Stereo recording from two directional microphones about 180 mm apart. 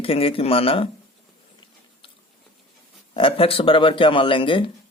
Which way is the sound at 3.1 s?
30° left (ahead or behind).